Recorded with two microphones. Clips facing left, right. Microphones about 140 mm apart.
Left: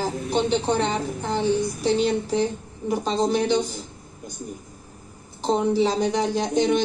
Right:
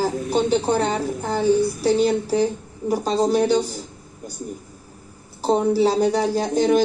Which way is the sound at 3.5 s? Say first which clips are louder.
Right 2 dB; 10° right (ahead or behind).